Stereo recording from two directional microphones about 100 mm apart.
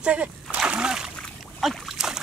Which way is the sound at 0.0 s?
10° right (ahead or behind).